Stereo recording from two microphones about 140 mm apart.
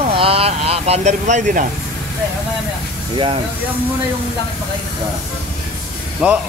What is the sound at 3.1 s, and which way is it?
Speech, 40° right (ahead or behind).